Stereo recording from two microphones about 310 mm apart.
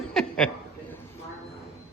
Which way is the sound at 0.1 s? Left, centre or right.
Centre.